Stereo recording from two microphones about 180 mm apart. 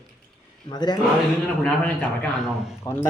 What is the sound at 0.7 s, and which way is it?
Speech, 25° left (ahead or behind).